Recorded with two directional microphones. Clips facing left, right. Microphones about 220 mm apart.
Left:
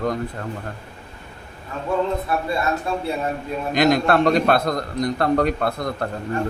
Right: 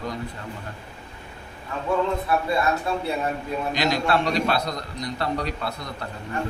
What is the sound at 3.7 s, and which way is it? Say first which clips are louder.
A man's voice: left 7 dB; 50° left (ahead or behind).